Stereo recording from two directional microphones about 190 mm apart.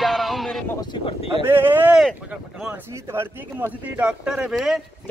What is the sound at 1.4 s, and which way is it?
A man's voice, 10° right (ahead or behind).